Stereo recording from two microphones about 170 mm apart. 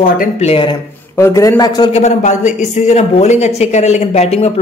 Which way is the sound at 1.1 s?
15° left (ahead or behind).